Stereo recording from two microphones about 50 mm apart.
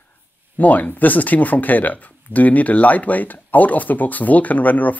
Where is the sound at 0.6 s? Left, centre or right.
Left.